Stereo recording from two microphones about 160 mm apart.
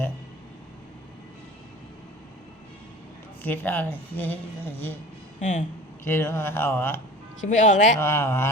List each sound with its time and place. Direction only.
3.4 s speech: 10° left (ahead or behind)
5.4 s speech: 50° left (ahead or behind)
6.1 s speech: 15° left (ahead or behind)
7.4 s speech: 50° left (ahead or behind)
7.9 s speech: 15° left (ahead or behind)